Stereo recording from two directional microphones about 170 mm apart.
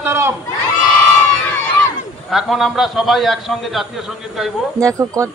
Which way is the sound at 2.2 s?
Centre (ahead or behind).